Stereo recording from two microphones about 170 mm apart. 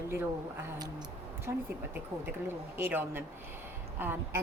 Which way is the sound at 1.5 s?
20° right (ahead or behind).